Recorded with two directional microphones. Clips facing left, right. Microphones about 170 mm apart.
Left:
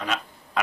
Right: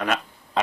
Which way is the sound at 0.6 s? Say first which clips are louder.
Right 3 dB; 30° right (ahead or behind).